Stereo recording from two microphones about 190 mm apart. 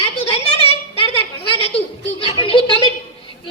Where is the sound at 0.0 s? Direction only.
30° left (ahead or behind).